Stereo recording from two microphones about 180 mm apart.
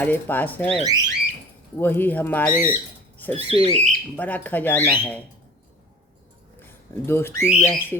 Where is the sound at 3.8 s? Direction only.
10° left (ahead or behind).